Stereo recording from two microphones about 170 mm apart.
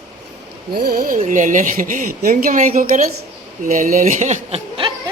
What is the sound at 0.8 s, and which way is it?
Speech, 65° right (ahead or behind).